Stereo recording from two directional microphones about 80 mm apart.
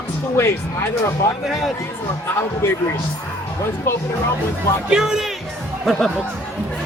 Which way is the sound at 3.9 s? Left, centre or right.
Left.